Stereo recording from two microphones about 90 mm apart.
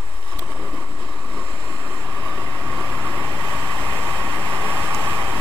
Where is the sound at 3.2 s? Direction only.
30° right (ahead or behind).